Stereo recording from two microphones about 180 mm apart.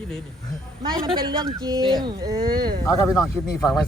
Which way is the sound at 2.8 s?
20° left (ahead or behind).